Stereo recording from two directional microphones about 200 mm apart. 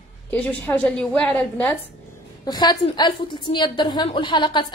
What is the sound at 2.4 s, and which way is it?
A woman's voice, 20° left (ahead or behind).